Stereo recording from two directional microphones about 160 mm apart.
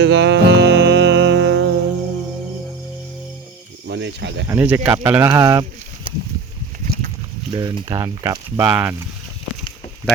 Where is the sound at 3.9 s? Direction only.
90° right.